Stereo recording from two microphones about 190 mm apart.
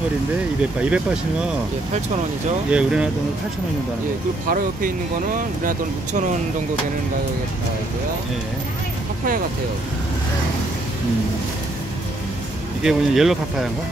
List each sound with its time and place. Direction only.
0.8 s speech: 5° right (ahead or behind)
2.7 s speech: 5° right (ahead or behind)
4.5 s speech: 45° right (ahead or behind)
12.8 s speech: centre (ahead or behind)